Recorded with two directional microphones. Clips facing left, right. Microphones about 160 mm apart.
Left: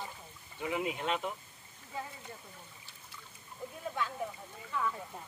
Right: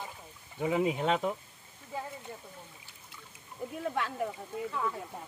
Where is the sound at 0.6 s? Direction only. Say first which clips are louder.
Right 6 dB; 35° right (ahead or behind).